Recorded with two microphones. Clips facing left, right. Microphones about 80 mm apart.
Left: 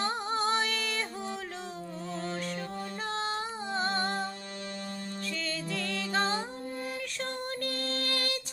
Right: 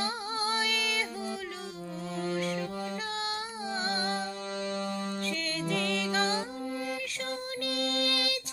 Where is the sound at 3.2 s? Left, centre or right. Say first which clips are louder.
Left 2 dB; left.